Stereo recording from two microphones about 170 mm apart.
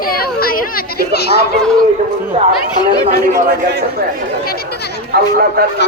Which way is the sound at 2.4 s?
35° right (ahead or behind).